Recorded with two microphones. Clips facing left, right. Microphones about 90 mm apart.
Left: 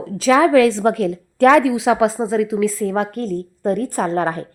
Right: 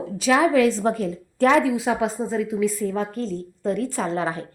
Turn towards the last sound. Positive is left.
turn(degrees=50)  # may be behind; listen again after turning